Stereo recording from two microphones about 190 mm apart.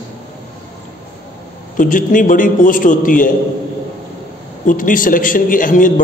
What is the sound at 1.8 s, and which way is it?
A man's voice, 45° left (ahead or behind).